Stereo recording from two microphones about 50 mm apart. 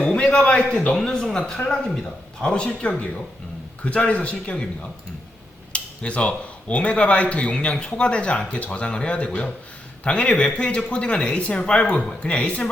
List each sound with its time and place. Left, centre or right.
0.0 s a man's voice: centre
0.9 s speech: centre
5.7 s speech: left